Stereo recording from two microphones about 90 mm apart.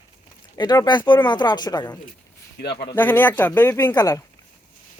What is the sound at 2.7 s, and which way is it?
Speech, 65° left (ahead or behind).